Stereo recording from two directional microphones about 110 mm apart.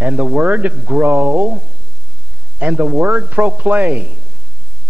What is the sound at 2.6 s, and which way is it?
A man's voice, 15° right (ahead or behind).